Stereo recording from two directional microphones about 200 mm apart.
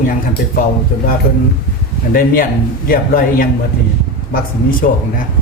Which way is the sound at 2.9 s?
45° left (ahead or behind).